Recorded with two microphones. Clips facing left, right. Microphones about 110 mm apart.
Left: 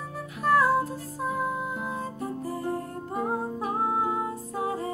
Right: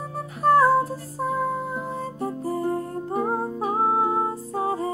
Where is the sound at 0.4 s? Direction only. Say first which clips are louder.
Right 5 dB; 35° right (ahead or behind).